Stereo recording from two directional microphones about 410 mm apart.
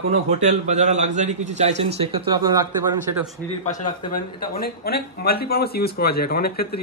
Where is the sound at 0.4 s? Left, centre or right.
Centre.